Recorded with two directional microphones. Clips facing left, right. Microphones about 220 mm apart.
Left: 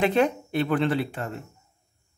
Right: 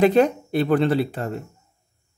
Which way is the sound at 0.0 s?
40° right (ahead or behind).